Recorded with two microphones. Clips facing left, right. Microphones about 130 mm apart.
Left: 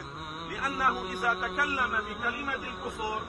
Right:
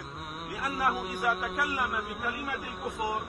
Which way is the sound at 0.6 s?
Centre (ahead or behind).